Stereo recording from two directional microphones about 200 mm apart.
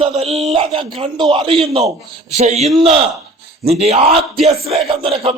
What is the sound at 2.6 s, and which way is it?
Speech, centre (ahead or behind).